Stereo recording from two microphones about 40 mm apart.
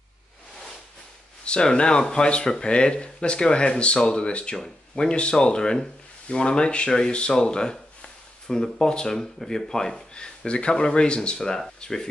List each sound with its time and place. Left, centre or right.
1.4 s speech: left
9.9 s speech: left